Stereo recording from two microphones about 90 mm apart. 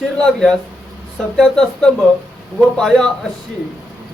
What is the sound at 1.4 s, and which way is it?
Speech, 5° left (ahead or behind).